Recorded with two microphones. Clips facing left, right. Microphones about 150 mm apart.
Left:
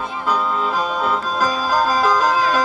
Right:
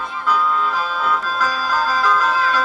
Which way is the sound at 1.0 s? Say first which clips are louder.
Right 1 dB; 20° left (ahead or behind).